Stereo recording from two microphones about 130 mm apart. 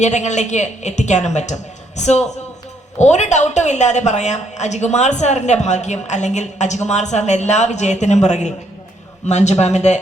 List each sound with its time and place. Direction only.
0.0 s a woman's voice: 65° left (ahead or behind)